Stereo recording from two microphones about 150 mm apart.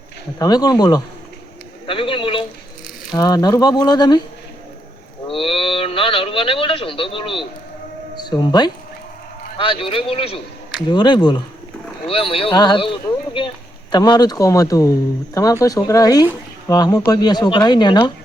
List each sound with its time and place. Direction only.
0.3 s speech: 25° left (ahead or behind)
1.9 s a sound: 35° left (ahead or behind)
3.1 s speech: 25° left (ahead or behind)
5.3 s speech: 35° left (ahead or behind)